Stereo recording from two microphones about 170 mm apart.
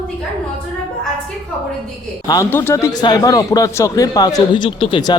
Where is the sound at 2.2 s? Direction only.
20° left (ahead or behind).